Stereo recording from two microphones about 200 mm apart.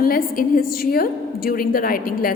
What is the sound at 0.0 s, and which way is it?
A woman's voice, 45° left (ahead or behind).